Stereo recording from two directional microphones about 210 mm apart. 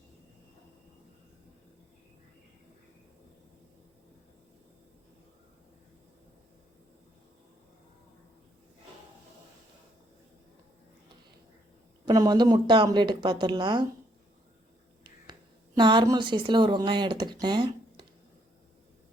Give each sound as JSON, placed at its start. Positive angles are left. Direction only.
{"t": 12.0, "sound": "speech", "side_deg": -20}
{"t": 15.0, "sound": "speech", "side_deg": -20}